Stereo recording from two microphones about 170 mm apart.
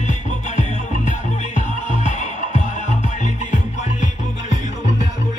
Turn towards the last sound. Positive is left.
turn(degrees=45)  # may be behind; listen again after turning